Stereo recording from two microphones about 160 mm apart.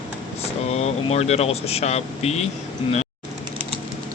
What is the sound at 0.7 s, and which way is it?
Speech, 40° left (ahead or behind).